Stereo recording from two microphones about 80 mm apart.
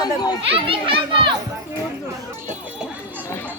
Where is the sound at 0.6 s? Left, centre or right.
Right.